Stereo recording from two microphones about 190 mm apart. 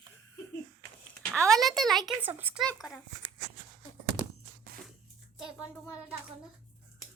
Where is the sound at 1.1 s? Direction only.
Centre (ahead or behind).